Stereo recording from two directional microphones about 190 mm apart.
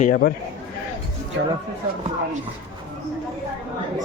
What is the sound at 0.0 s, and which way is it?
Speech, 50° left (ahead or behind).